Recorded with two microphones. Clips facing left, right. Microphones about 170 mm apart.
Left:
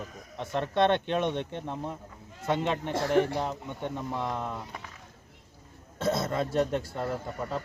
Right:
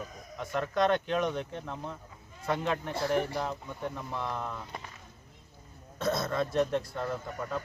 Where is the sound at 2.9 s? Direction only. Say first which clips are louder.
Left 6 dB; 75° left (ahead or behind).